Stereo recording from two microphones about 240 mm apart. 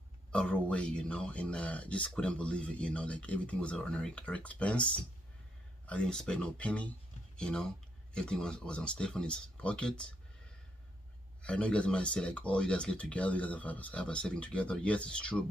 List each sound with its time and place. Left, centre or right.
0.3 s speech: centre
11.4 s speech: centre